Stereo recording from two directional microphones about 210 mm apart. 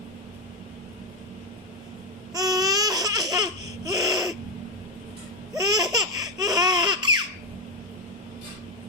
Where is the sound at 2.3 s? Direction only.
15° right (ahead or behind).